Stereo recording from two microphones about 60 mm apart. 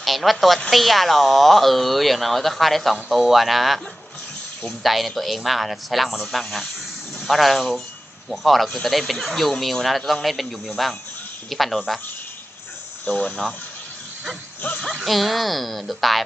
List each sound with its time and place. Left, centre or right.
0.0 s a woman's voice: centre
4.8 s speech: centre
13.1 s speech: left
14.8 s speech: centre
15.0 s speech: centre